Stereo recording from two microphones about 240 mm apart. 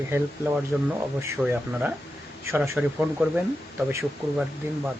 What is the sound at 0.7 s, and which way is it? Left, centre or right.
Speech, centre.